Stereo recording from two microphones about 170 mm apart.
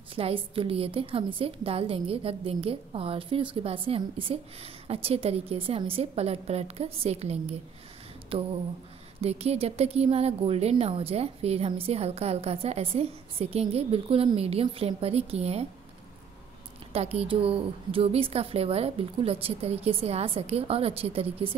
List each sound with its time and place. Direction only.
0.1 s a woman's voice: 30° right (ahead or behind)
16.9 s a woman's voice: 35° right (ahead or behind)